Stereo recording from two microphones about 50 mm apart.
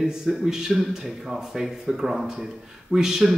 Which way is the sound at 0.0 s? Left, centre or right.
Centre.